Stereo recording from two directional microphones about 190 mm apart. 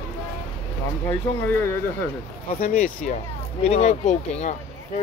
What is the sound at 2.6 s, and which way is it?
Speech, 45° left (ahead or behind).